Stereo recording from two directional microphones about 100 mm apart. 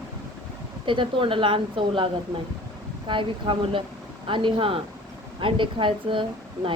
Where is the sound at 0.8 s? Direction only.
55° right (ahead or behind).